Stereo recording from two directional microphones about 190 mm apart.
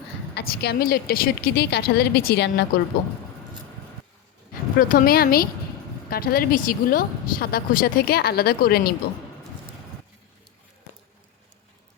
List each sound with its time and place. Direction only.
0.3 s a woman's voice: 60° left (ahead or behind)
4.8 s speech: 45° left (ahead or behind)